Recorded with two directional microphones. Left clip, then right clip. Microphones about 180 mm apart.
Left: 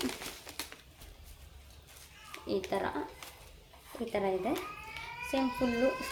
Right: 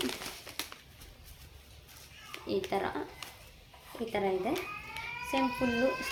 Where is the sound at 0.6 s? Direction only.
20° right (ahead or behind).